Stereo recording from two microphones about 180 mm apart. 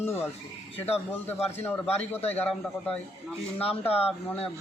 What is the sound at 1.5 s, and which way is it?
Speech, 10° left (ahead or behind).